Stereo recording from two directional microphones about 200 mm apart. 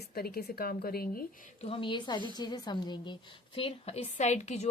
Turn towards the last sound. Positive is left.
turn(degrees=35)  # may be behind; listen again after turning